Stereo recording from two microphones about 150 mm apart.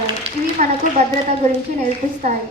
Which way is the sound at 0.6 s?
50° right (ahead or behind).